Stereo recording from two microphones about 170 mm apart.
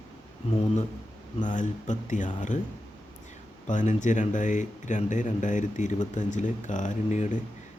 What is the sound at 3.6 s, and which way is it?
Speech, 45° left (ahead or behind).